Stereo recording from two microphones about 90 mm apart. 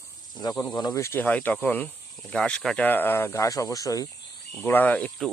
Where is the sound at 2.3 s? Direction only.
10° left (ahead or behind).